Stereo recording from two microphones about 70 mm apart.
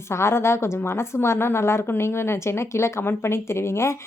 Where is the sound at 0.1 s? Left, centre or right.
Left.